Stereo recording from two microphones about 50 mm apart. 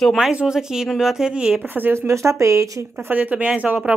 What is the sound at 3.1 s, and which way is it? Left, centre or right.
Speech, right.